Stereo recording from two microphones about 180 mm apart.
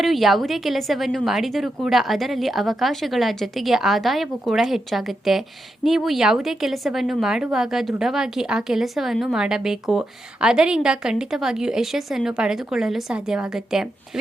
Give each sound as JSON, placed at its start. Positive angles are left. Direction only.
{"t": 0.0, "sound": "a woman's voice", "side_deg": 0}